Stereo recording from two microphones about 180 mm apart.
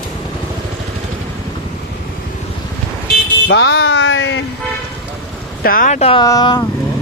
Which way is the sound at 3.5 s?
75° left (ahead or behind).